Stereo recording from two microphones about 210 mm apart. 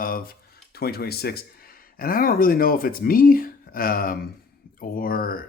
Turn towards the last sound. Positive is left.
turn(degrees=45)  # may be behind; listen again after turning